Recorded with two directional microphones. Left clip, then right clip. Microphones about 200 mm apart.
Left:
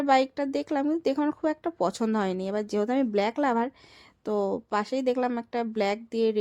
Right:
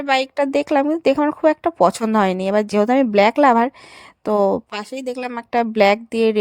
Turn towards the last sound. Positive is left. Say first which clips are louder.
# right 11 dB
turn(degrees=-35)  # may be behind; listen again after turning